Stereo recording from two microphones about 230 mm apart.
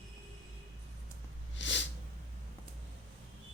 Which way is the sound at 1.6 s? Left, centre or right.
Left.